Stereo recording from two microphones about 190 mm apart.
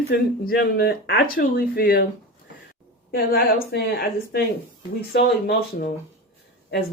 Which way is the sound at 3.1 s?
55° left (ahead or behind).